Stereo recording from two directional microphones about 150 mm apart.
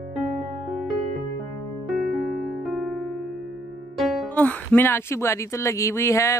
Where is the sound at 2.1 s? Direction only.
Centre (ahead or behind).